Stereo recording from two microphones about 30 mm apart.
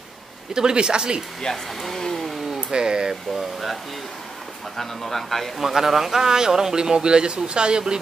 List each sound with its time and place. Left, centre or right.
0.6 s speech: right
1.5 s speech: centre
2.0 s vehicle: centre
2.7 s speech: right
4.7 s speech: centre
5.6 s a man's voice: centre
6.2 s speech: centre